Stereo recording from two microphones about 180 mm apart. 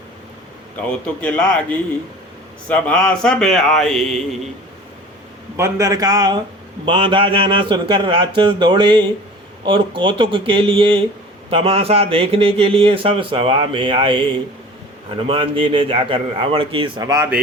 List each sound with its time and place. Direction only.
0.8 s speech: 5° left (ahead or behind)
5.5 s speech: 15° right (ahead or behind)